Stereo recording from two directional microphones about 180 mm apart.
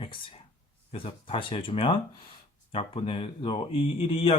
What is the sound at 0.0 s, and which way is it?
Speech, 30° left (ahead or behind).